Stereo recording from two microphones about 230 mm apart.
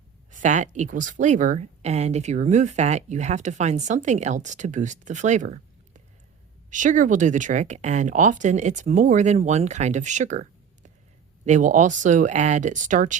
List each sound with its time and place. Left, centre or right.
0.3 s speech: right
11.4 s speech: right